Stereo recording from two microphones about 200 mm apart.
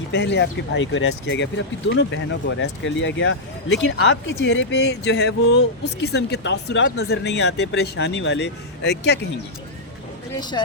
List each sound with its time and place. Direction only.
0.1 s speech: 60° left (ahead or behind)